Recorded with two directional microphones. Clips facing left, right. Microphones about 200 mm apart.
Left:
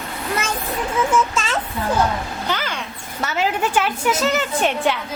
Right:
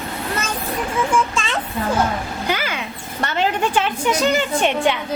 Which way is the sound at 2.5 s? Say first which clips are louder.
Right 2 dB; 10° right (ahead or behind).